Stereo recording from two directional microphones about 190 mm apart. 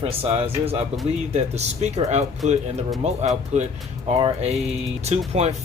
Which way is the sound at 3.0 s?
35° right (ahead or behind).